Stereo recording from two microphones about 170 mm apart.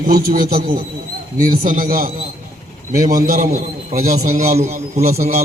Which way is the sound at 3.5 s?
55° right (ahead or behind).